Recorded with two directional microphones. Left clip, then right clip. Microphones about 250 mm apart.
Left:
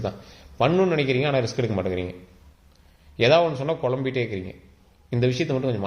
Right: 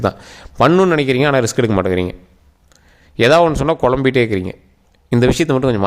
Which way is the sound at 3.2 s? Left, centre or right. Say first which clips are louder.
Right 7 dB; right.